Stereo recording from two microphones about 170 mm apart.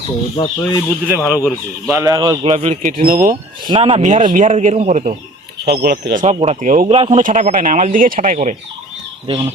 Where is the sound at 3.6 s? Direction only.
30° right (ahead or behind).